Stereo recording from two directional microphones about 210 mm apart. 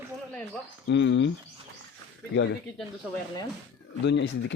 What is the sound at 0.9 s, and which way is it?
Speech, 60° left (ahead or behind).